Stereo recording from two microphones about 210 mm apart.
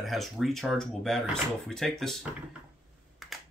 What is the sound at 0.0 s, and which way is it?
Speech, centre (ahead or behind).